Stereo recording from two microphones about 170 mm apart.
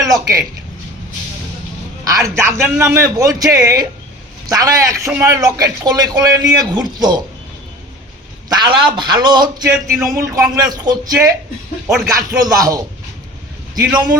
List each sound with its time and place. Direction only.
0.0 s a man's voice: 20° right (ahead or behind)
2.0 s a man's voice: 20° right (ahead or behind)
8.4 s a man's voice: 25° right (ahead or behind)